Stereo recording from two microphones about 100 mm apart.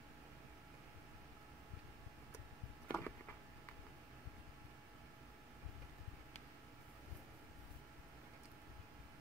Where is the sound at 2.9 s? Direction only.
15° left (ahead or behind).